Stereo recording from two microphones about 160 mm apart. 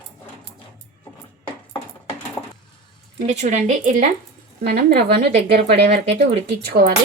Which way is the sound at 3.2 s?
45° right (ahead or behind).